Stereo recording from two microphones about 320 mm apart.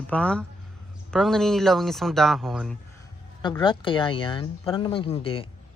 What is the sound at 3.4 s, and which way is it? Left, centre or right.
Speech, centre.